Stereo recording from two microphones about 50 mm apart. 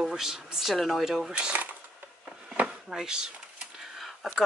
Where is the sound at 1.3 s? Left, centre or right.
Right.